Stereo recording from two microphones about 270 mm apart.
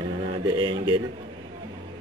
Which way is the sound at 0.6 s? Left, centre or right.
Centre.